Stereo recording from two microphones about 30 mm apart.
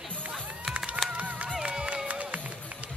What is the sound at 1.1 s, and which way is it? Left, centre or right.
Run, right.